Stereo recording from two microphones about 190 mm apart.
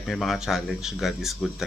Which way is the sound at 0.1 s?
Centre (ahead or behind).